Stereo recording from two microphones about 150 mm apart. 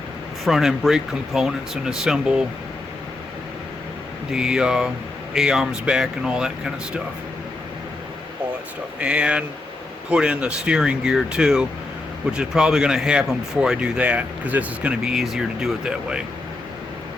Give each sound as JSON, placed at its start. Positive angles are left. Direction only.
{"t": 0.4, "sound": "speech", "side_deg": 0}
{"t": 4.3, "sound": "speech", "side_deg": -5}
{"t": 9.0, "sound": "speech", "side_deg": -5}